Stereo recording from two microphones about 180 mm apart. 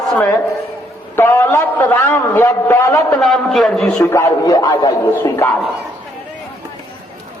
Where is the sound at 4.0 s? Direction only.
15° left (ahead or behind).